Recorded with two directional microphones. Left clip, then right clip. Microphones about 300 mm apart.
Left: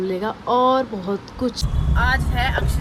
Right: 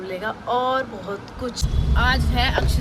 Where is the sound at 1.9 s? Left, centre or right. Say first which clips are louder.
Even; centre.